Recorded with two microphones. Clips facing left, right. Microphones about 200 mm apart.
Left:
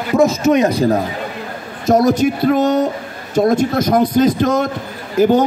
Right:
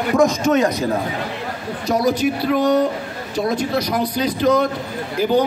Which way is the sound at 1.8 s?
45° left (ahead or behind).